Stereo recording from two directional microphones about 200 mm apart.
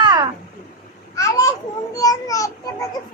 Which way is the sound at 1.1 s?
15° left (ahead or behind).